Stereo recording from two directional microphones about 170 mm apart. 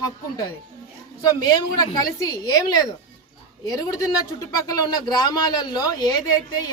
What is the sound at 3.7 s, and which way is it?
Speech, 20° left (ahead or behind).